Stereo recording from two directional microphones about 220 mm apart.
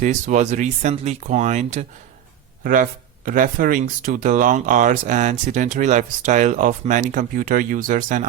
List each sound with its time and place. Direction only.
0.0 s speech: 35° right (ahead or behind)
3.2 s speech: 40° right (ahead or behind)